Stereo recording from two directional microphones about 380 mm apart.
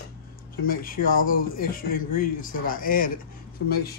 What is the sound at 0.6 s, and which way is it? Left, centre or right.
Speech, left.